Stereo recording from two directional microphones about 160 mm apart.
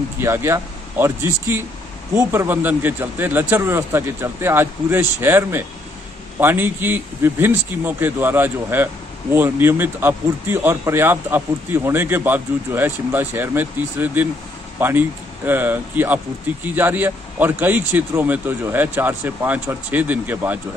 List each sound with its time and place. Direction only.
0.2 s a man's voice: 15° right (ahead or behind)